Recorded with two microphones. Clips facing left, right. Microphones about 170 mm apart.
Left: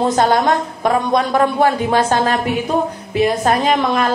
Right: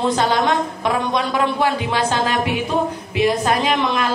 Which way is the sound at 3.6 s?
45° left (ahead or behind).